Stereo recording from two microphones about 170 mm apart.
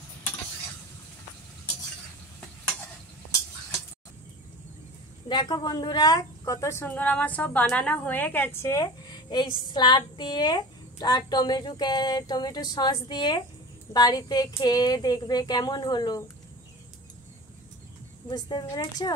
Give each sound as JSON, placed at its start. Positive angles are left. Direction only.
{"t": 5.3, "sound": "a woman's voice", "side_deg": 25}
{"t": 18.3, "sound": "a woman's voice", "side_deg": 25}